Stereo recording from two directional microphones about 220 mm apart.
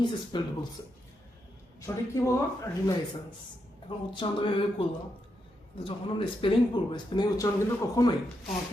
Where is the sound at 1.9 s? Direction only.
15° left (ahead or behind).